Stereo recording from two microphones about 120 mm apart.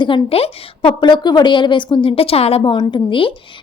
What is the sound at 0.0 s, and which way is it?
A woman's voice, 50° left (ahead or behind).